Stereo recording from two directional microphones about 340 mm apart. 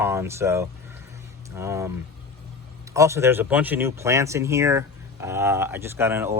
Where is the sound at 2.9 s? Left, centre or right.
Centre.